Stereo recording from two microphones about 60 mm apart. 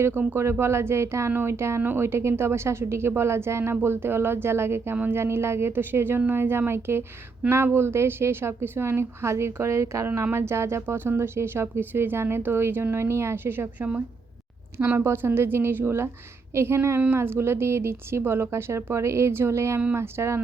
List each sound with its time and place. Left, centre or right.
0.0 s speech: right
0.6 s speech: right
10.3 s speech: right
14.9 s speech: right